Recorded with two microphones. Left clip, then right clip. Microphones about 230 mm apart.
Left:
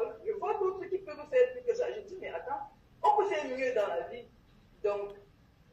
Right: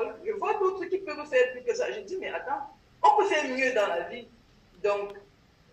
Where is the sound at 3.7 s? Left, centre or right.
Right.